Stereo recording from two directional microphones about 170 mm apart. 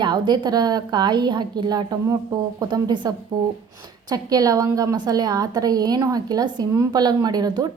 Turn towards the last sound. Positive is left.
turn(degrees=-25)  # may be behind; listen again after turning